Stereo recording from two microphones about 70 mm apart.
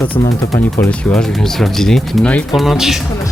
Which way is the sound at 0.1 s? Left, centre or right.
Left.